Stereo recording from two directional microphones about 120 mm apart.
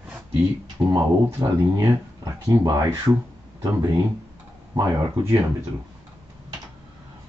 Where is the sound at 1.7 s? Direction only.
30° right (ahead or behind).